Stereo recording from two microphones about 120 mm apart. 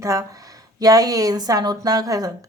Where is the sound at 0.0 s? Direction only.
25° right (ahead or behind).